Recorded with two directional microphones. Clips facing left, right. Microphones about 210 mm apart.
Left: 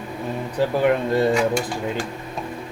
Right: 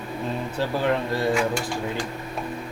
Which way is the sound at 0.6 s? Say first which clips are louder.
Left 5 dB; 15° left (ahead or behind).